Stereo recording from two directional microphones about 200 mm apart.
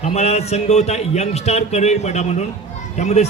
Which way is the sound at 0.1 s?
30° left (ahead or behind).